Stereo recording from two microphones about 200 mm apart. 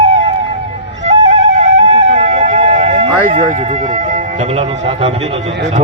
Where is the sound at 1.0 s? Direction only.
35° right (ahead or behind).